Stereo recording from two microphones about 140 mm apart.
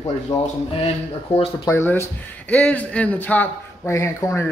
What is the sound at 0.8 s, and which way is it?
Speech, 45° left (ahead or behind).